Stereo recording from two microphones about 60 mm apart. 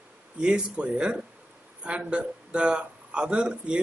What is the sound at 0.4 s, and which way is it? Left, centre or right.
A man's voice, centre.